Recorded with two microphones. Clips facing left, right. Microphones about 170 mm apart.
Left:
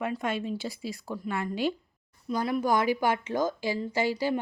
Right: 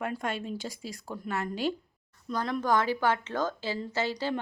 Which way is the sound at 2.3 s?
5° left (ahead or behind).